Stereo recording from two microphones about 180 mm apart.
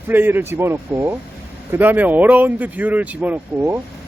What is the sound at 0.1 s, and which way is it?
Speech, 10° right (ahead or behind).